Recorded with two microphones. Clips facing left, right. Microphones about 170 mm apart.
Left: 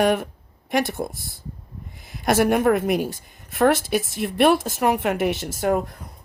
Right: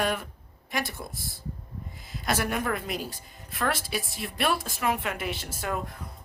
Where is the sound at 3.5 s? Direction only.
50° left (ahead or behind).